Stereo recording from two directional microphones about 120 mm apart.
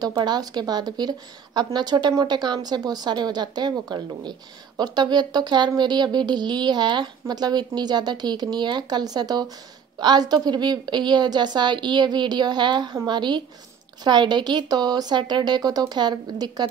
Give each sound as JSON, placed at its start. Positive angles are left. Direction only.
{"t": 0.0, "sound": "a woman's voice", "side_deg": -35}